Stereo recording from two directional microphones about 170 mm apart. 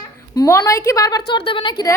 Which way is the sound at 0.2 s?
15° left (ahead or behind).